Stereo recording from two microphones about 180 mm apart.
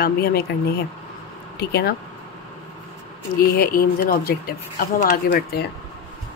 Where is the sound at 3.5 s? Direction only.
55° left (ahead or behind).